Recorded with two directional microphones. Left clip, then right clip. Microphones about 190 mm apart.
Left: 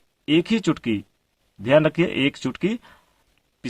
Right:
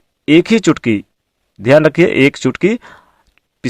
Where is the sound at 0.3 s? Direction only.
35° right (ahead or behind).